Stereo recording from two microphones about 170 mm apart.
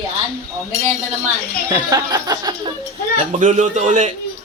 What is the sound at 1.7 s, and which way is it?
Speech, 20° right (ahead or behind).